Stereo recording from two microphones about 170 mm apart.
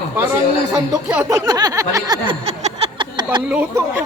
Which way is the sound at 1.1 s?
15° right (ahead or behind).